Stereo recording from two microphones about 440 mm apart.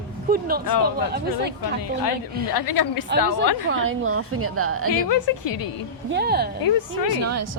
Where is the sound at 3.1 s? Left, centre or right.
Right.